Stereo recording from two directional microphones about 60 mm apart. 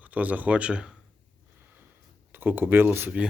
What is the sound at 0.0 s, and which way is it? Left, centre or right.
Speech, right.